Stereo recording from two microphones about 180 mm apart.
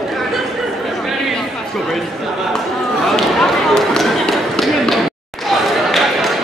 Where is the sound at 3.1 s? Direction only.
Centre (ahead or behind).